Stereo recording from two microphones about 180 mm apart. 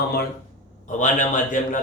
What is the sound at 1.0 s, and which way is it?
Speech, 45° left (ahead or behind).